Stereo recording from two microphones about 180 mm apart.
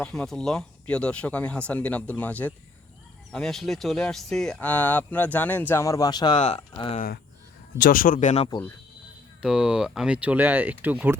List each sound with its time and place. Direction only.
0.0 s speech: 5° left (ahead or behind); by 7.0 s 30° left (ahead or behind)
7.8 s speech: 50° left (ahead or behind)
9.4 s speech: 5° right (ahead or behind)